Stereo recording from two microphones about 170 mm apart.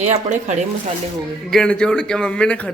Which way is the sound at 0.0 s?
45° right (ahead or behind).